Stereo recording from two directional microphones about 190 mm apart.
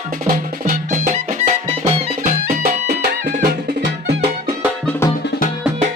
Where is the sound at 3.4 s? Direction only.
55° right (ahead or behind).